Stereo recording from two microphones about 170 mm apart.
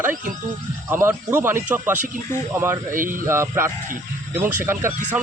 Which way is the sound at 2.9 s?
55° right (ahead or behind).